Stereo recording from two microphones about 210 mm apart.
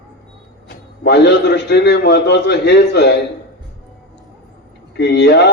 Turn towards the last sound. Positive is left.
turn(degrees=55)  # may be behind; listen again after turning